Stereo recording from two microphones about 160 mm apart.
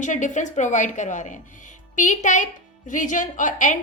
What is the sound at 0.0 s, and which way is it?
A woman's voice, 50° left (ahead or behind).